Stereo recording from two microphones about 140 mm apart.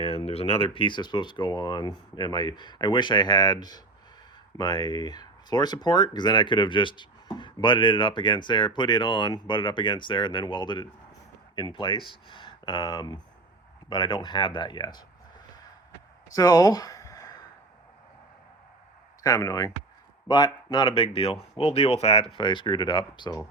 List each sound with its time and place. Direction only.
0.0 s speech: 45° left (ahead or behind)
16.3 s speech: 25° left (ahead or behind)
19.2 s speech: 25° left (ahead or behind); by 22.3 s 45° left (ahead or behind)
22.4 s speech: 35° left (ahead or behind)